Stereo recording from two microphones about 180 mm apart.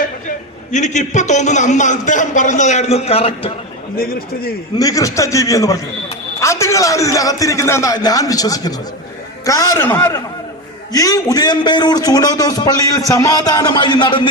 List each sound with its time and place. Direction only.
0.3 s a man's voice: 40° left (ahead or behind)
3.9 s a man's voice: 55° left (ahead or behind)
4.8 s a man's voice: 20° left (ahead or behind)